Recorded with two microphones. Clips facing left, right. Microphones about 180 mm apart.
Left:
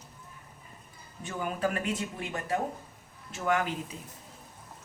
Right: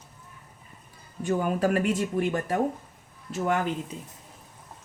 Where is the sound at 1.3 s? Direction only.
40° right (ahead or behind).